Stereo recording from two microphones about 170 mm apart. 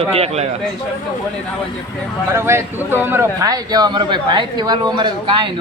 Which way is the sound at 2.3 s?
15° right (ahead or behind).